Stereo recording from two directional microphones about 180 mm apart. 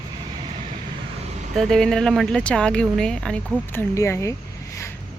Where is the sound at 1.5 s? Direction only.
Centre (ahead or behind).